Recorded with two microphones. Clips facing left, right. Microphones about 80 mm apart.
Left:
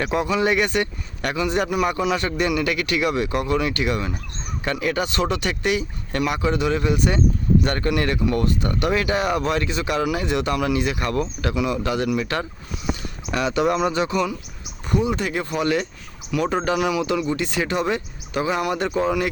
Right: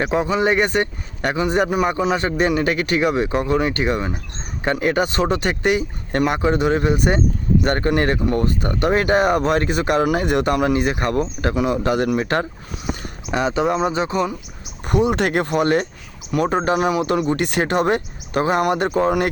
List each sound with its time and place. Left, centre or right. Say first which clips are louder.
0.0 s speech: right 2 dB; right
13.3 s speech: right 2 dB; right
14.8 s speech: right 4 dB; right
15.6 s speech: right 4 dB; right